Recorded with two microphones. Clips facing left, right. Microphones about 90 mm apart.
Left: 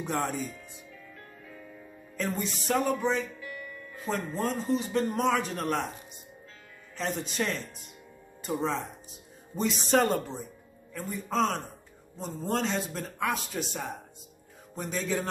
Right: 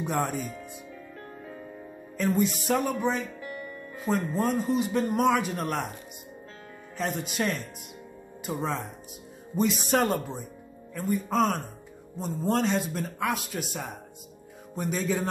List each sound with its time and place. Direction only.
0.0 s speech: 10° right (ahead or behind)
2.1 s speech: 10° right (ahead or behind)
3.3 s music: 35° right (ahead or behind)
3.9 s speech: 10° right (ahead or behind)
7.0 s speech: 10° right (ahead or behind)